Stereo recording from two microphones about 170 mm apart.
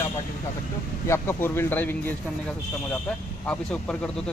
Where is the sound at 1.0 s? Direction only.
15° left (ahead or behind).